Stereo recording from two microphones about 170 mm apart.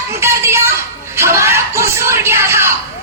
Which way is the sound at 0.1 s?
15° right (ahead or behind).